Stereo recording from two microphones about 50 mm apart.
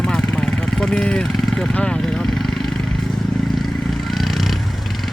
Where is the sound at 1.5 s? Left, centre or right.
Centre.